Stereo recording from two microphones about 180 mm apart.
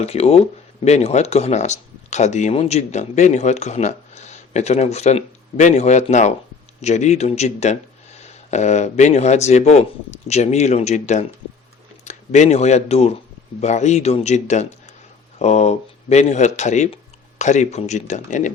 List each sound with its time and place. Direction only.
0.0 s speech: 35° left (ahead or behind)